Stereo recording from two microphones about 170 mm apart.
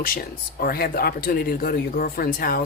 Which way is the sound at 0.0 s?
60° left (ahead or behind).